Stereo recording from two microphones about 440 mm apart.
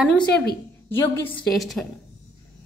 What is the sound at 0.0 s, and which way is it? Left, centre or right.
A woman's voice, centre.